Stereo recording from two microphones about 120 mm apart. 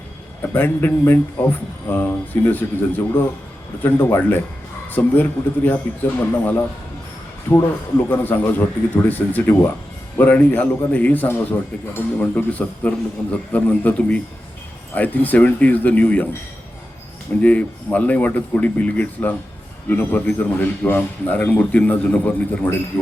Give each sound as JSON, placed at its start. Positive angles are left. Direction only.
{"t": 0.5, "sound": "a man's voice", "side_deg": 15}
{"t": 3.8, "sound": "a man's voice", "side_deg": 15}
{"t": 17.4, "sound": "a man's voice", "side_deg": 10}